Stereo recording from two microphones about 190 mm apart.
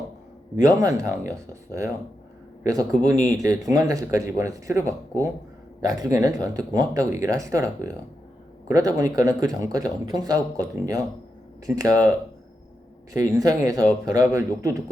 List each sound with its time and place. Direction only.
0.5 s speech: 15° right (ahead or behind)
3.0 s speech: 20° right (ahead or behind)
13.1 s speech: 20° right (ahead or behind)